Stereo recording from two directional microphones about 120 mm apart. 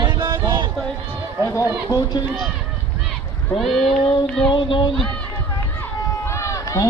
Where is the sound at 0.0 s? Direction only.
35° right (ahead or behind).